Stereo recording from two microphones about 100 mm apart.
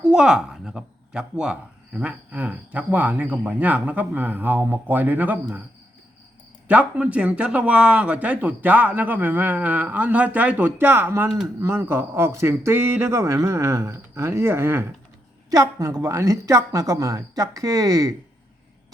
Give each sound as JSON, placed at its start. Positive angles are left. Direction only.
{"t": 0.0, "sound": "speech", "side_deg": -5}
{"t": 6.7, "sound": "speech", "side_deg": -10}